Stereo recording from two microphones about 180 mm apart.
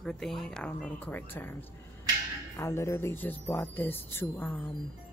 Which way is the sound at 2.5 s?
15° left (ahead or behind).